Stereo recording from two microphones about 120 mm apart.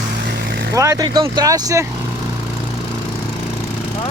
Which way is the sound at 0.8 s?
30° right (ahead or behind).